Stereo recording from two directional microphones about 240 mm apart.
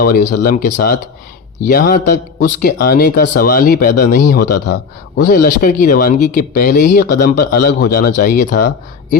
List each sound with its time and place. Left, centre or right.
0.0 s speech: left
4.5 s speech: left